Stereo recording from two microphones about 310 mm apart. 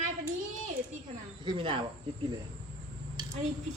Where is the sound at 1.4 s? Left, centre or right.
Centre.